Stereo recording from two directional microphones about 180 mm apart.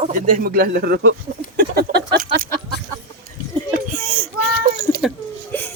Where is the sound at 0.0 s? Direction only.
45° right (ahead or behind).